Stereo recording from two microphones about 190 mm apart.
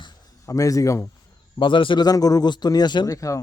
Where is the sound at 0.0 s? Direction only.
15° left (ahead or behind).